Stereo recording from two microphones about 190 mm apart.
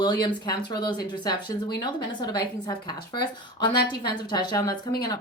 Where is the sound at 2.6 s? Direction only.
20° left (ahead or behind).